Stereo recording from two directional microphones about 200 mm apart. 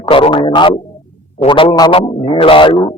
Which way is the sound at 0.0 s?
25° left (ahead or behind).